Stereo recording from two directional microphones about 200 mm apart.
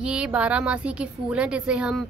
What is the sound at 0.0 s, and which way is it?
A woman's voice, 5° right (ahead or behind).